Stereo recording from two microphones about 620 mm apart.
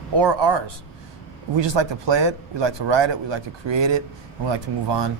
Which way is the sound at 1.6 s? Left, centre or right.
Right.